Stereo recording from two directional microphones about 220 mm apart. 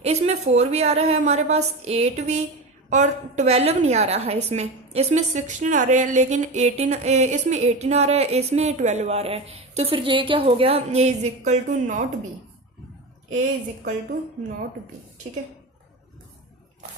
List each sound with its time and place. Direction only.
0.0 s a woman's voice: 30° right (ahead or behind)